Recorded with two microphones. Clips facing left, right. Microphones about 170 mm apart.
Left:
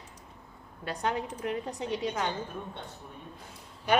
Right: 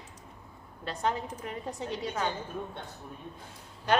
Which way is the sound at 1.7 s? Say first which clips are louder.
Left 2 dB; 15° left (ahead or behind).